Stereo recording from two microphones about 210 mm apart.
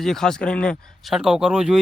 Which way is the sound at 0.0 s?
Centre (ahead or behind).